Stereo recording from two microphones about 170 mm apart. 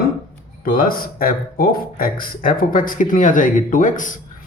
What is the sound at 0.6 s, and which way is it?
Speech, 55° left (ahead or behind).